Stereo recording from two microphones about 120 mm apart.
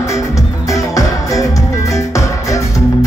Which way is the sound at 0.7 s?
25° left (ahead or behind).